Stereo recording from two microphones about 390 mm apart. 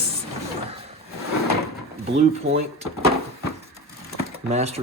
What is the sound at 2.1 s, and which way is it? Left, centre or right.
Speech, centre.